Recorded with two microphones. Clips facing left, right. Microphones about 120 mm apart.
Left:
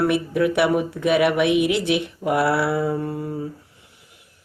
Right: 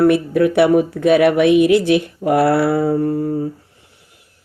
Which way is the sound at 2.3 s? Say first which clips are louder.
Right 6 dB; 40° right (ahead or behind).